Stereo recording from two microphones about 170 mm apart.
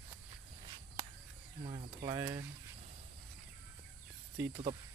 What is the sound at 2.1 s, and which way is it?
Speech, 15° right (ahead or behind).